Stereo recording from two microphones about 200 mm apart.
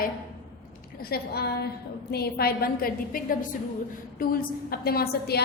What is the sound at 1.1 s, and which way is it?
A woman's voice, 55° left (ahead or behind).